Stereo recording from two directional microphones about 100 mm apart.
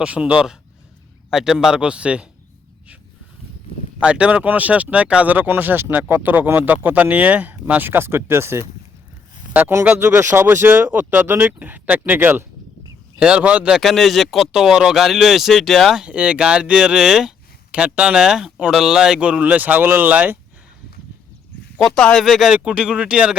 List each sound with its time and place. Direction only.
0.0 s speech: 10° right (ahead or behind)
4.0 s speech: 10° right (ahead or behind)
13.1 s speech: 10° right (ahead or behind)
16.0 s speech: 10° right (ahead or behind)
21.8 s speech: 5° left (ahead or behind)
22.5 s speech: 10° right (ahead or behind)